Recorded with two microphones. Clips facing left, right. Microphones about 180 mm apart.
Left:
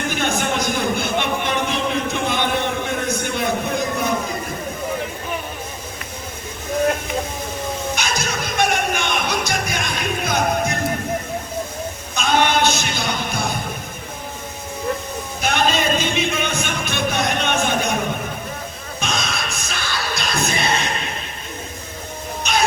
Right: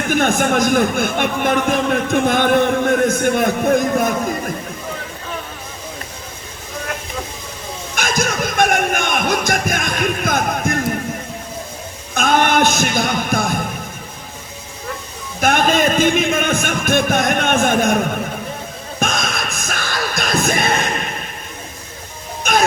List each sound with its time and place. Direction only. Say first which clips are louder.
0.1 s a man's voice: right 8 dB; 50° right (ahead or behind)
7.9 s music: right 4 dB; 50° right (ahead or behind)
12.1 s a sound: right 3 dB; 50° right (ahead or behind)
15.4 s music: right 5 dB; 50° right (ahead or behind)
18.9 s music: right 4 dB; 50° right (ahead or behind)